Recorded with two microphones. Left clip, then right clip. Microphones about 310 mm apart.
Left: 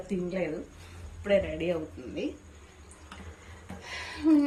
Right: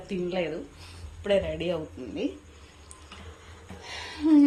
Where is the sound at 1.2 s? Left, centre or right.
Centre.